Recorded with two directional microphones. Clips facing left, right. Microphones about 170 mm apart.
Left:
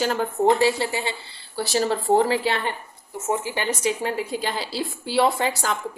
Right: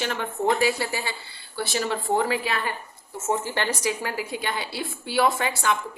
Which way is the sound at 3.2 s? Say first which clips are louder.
Left 1 dB; 15° left (ahead or behind).